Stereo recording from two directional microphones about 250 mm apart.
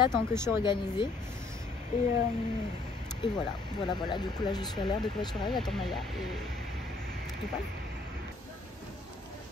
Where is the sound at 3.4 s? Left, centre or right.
Centre.